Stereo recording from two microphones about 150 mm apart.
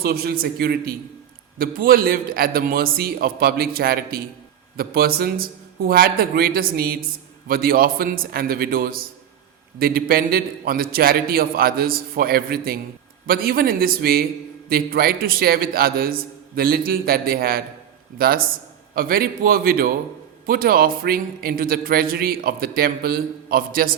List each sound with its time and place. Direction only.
0.0 s a man's voice: 90° right
1.5 s a man's voice: 75° right (ahead or behind); by 7.0 s 90° right
7.4 s a man's voice: 75° right (ahead or behind)